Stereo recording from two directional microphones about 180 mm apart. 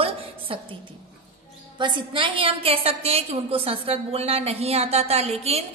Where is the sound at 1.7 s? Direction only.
25° right (ahead or behind).